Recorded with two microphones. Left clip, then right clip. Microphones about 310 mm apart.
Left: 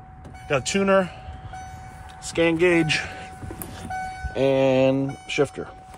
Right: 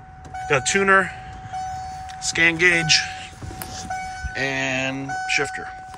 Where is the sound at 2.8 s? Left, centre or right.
Left.